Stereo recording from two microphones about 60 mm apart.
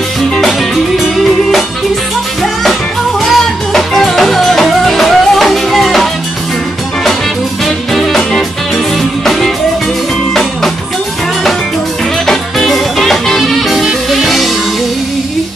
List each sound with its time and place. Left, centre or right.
3.3 s music: centre
7.6 s music: centre
12.3 s music: centre